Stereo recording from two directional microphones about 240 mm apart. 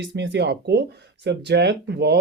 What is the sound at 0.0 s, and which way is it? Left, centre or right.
Speech, right.